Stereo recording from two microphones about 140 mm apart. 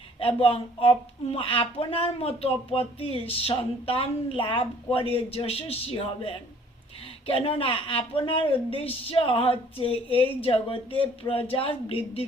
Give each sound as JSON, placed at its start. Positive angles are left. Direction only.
{"t": 0.2, "sound": "speech", "side_deg": 40}